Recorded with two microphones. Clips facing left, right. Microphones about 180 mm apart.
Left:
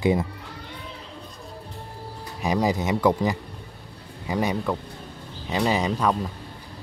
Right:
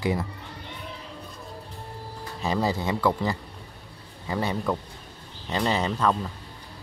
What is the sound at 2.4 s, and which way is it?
Speech, 15° left (ahead or behind).